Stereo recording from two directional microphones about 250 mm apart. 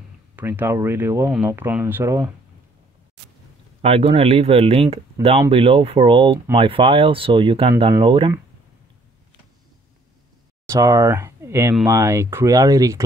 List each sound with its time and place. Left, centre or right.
0.4 s speech: centre
3.8 s speech: right
10.7 s speech: centre